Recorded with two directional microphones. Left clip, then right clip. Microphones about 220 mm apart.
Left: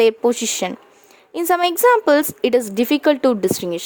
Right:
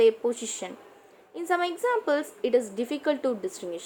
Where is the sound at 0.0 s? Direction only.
50° left (ahead or behind).